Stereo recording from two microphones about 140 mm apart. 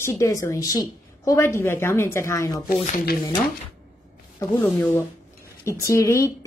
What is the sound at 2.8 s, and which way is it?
Speech, 85° left.